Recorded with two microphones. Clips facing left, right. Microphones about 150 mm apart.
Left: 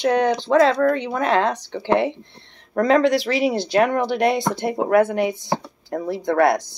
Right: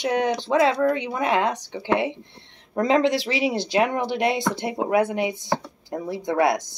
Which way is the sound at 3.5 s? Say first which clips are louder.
Left 3 dB; 50° left (ahead or behind).